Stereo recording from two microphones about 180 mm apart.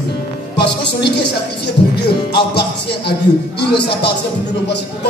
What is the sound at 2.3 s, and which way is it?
Music, 65° left (ahead or behind).